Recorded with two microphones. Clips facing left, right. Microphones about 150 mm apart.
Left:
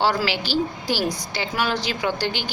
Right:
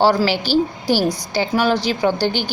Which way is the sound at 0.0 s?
35° right (ahead or behind).